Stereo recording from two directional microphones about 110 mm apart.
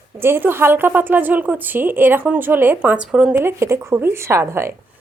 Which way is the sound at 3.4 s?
25° right (ahead or behind).